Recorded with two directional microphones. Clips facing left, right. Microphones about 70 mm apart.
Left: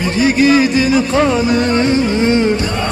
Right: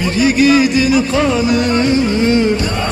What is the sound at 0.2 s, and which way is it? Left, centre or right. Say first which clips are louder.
Music: even; left.